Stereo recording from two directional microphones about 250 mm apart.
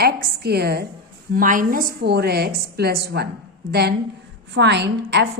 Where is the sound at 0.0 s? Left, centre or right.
Right.